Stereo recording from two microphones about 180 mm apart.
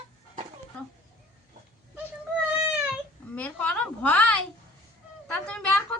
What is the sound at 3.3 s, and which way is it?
A woman's voice, 5° left (ahead or behind).